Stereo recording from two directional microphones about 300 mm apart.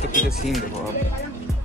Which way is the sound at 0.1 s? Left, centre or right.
Left.